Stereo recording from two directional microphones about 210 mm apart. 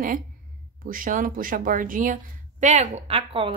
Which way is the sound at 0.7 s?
40° right (ahead or behind).